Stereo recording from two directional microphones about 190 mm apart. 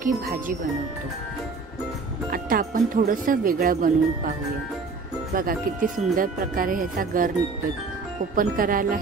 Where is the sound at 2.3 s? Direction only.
50° right (ahead or behind).